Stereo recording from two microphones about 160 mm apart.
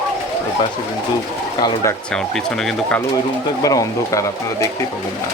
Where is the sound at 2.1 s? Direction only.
5° left (ahead or behind).